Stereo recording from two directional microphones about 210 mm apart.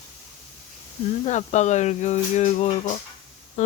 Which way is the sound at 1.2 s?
35° left (ahead or behind).